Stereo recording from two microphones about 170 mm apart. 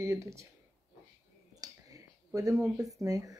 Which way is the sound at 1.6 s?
20° right (ahead or behind).